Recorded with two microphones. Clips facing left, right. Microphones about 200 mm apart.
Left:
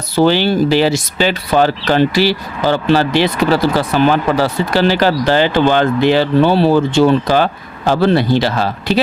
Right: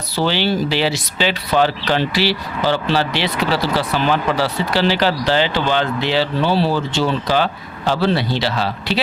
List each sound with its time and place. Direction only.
0.2 s speech: 50° left (ahead or behind)